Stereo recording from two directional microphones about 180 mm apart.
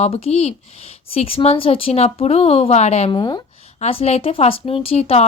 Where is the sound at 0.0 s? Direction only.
35° left (ahead or behind).